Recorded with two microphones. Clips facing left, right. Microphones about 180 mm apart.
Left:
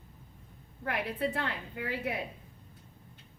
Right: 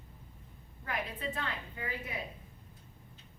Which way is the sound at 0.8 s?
65° left (ahead or behind).